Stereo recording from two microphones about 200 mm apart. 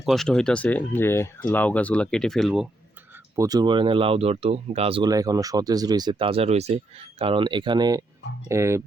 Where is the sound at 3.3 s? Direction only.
20° right (ahead or behind).